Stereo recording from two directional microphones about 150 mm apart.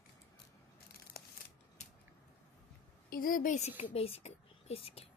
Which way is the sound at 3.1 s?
70° left (ahead or behind).